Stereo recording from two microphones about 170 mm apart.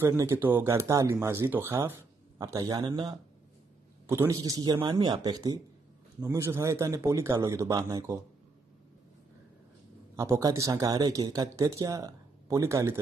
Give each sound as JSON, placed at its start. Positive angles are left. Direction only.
{"t": 0.0, "sound": "speech", "side_deg": -15}
{"t": 10.1, "sound": "speech", "side_deg": -20}